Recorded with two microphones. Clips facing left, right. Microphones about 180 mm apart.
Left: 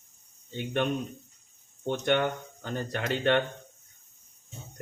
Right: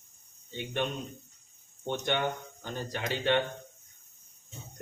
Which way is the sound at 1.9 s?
55° left (ahead or behind).